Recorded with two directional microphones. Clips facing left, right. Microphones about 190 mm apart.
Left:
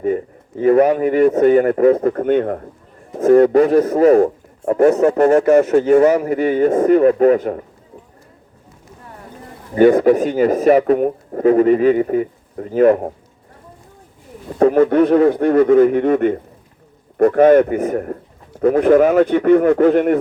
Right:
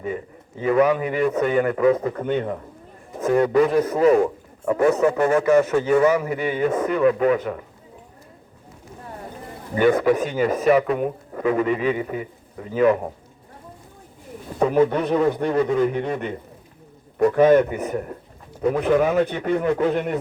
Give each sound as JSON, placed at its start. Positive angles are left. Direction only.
{"t": 0.6, "sound": "a man's voice", "side_deg": 45}
{"t": 9.7, "sound": "a man's voice", "side_deg": 40}
{"t": 14.6, "sound": "a man's voice", "side_deg": 55}